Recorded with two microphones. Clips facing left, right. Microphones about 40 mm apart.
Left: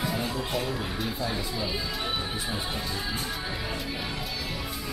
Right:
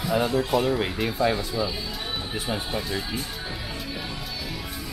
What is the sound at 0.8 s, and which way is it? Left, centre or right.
Speech, right.